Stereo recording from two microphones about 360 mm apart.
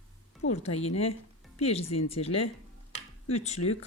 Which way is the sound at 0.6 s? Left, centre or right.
Centre.